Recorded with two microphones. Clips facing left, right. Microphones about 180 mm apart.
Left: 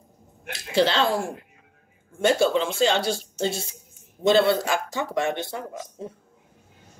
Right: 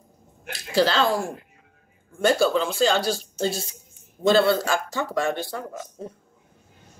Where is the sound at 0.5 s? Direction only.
25° left (ahead or behind).